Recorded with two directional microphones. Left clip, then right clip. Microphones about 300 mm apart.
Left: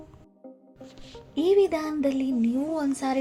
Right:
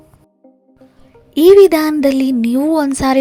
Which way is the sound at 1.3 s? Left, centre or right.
Right.